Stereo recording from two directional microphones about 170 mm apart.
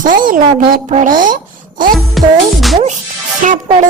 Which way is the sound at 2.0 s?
Centre (ahead or behind).